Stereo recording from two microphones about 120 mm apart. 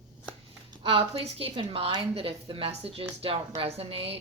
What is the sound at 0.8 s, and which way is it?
Speech, 50° right (ahead or behind).